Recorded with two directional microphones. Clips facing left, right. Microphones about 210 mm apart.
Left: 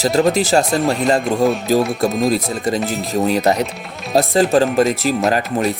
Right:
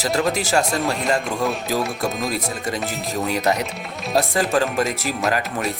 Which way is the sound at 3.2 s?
35° left (ahead or behind).